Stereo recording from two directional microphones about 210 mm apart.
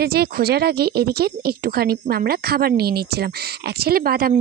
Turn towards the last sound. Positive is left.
turn(degrees=-45)  # may be behind; listen again after turning